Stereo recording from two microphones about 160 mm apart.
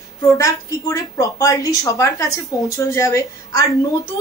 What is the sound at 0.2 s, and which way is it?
A woman's voice, 20° left (ahead or behind).